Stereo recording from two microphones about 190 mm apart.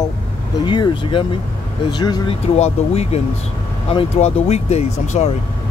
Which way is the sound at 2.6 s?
35° left (ahead or behind).